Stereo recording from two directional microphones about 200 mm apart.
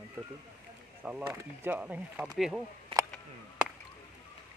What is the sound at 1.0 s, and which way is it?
Speech, 10° right (ahead or behind).